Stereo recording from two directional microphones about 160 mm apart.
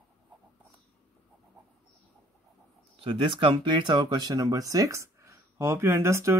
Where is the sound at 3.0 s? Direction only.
35° right (ahead or behind).